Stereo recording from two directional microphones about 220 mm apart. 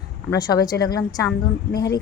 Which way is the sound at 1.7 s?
50° left (ahead or behind).